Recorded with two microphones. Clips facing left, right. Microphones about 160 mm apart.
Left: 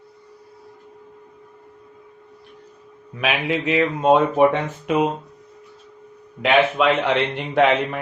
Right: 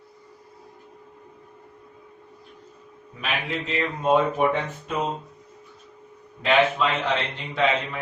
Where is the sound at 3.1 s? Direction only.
75° left (ahead or behind).